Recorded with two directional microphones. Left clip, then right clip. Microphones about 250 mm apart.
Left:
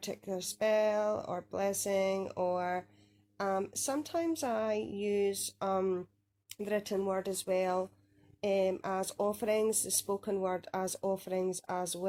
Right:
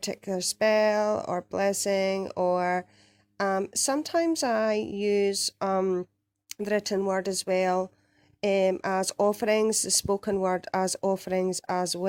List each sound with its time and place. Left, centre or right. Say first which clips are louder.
0.0 s speech: right 8 dB; right